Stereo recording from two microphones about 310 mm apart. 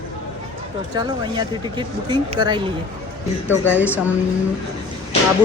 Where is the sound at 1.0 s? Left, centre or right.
Centre.